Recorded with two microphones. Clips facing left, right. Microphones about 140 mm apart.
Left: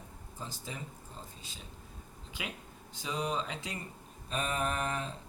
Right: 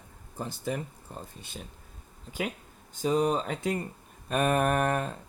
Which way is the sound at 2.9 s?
45° right (ahead or behind).